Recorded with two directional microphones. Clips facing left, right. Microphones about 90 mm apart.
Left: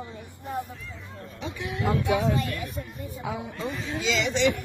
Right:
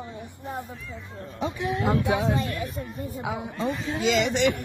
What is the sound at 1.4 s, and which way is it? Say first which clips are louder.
A woman's voice: right 4 dB; 40° right (ahead or behind).